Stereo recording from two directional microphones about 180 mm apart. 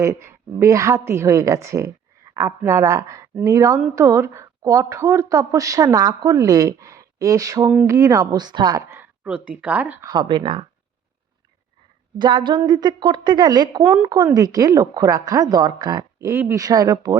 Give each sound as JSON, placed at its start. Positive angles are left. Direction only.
{"t": 0.0, "sound": "a woman's voice", "side_deg": -15}
{"t": 7.7, "sound": "a woman's voice", "side_deg": -5}
{"t": 7.9, "sound": "a woman's voice", "side_deg": -20}
{"t": 9.0, "sound": "a sound", "side_deg": -5}
{"t": 9.6, "sound": "a woman's voice", "side_deg": -10}
{"t": 10.0, "sound": "a woman's voice", "side_deg": -25}
{"t": 12.2, "sound": "a woman's voice", "side_deg": -25}
{"t": 13.8, "sound": "a woman's voice", "side_deg": -15}